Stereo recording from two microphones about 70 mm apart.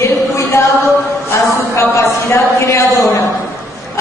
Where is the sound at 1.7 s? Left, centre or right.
Left.